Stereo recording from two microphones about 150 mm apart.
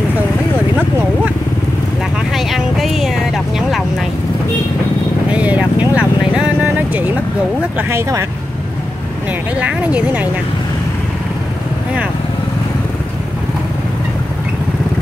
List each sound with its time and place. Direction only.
2.3 s vehicle: centre (ahead or behind)
5.3 s vehicle: 10° right (ahead or behind)
7.9 s speech: 20° right (ahead or behind)
9.6 s speech: 10° right (ahead or behind)